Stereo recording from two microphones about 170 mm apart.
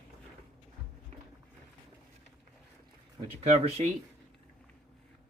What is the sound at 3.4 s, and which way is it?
Speech, 35° right (ahead or behind).